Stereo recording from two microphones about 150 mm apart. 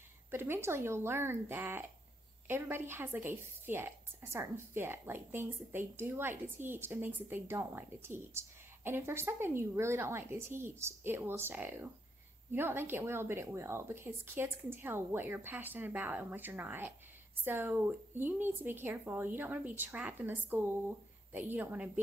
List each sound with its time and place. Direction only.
0.3 s a woman's voice: 15° right (ahead or behind)